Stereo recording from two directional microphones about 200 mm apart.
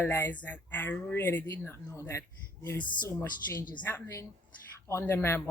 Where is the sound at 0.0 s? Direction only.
10° left (ahead or behind).